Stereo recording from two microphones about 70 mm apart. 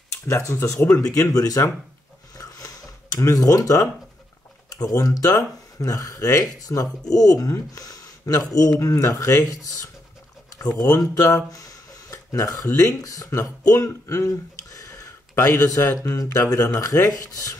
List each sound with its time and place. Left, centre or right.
0.3 s speech: left
0.8 s speech: left
2.3 s a sound: left
4.6 s speech: left